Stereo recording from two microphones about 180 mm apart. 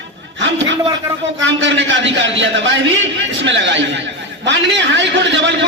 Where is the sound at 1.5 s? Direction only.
90° right.